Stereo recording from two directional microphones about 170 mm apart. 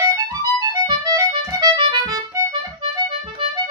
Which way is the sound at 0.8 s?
25° right (ahead or behind).